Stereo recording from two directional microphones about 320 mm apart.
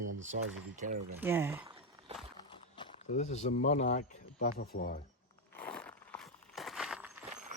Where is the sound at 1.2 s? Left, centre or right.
Centre.